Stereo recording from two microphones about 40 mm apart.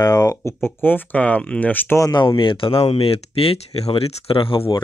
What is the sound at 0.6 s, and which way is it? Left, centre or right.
Speech, left.